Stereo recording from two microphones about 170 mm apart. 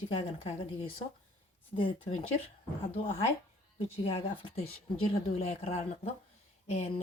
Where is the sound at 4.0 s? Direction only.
35° left (ahead or behind).